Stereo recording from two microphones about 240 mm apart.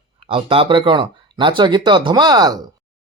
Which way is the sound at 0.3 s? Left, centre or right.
Right.